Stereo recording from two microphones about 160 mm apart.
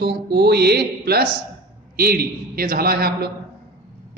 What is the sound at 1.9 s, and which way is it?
A man's voice, 70° right (ahead or behind).